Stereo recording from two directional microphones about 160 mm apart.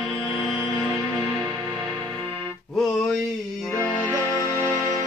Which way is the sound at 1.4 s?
25° right (ahead or behind).